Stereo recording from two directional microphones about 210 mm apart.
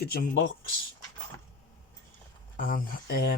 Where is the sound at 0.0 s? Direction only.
45° left (ahead or behind).